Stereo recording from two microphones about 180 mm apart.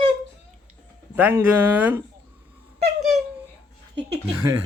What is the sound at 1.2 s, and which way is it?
Speech, 10° right (ahead or behind).